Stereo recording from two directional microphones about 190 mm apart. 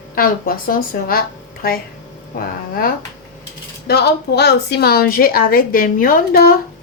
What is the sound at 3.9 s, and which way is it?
Speech, 55° left (ahead or behind).